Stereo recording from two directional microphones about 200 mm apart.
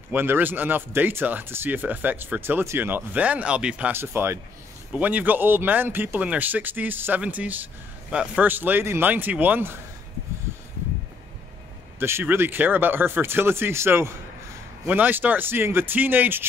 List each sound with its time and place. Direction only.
0.1 s speech: 10° right (ahead or behind)
12.0 s speech: 10° right (ahead or behind)